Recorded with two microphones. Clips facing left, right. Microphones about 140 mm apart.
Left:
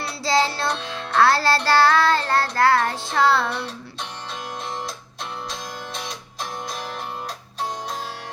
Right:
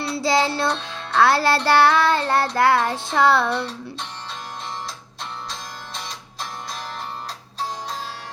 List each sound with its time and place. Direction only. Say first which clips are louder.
0.3 s child singing: right 1 dB; 20° right (ahead or behind)
5.5 s music: left 3 dB; 50° left (ahead or behind)